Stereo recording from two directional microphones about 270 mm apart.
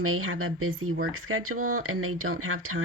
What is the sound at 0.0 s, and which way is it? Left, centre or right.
Speech, right.